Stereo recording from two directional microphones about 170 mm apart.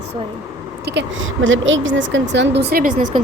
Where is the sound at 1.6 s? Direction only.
90° right; by 2.9 s 65° right (ahead or behind).